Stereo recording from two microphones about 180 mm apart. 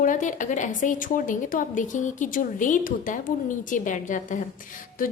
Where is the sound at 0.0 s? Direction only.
45° left (ahead or behind).